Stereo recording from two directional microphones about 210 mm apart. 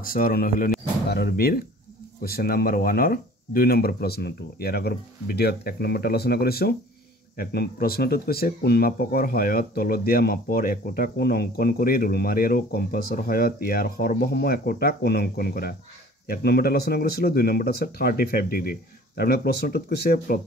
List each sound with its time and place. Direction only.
0.0 s speech: 45° left (ahead or behind)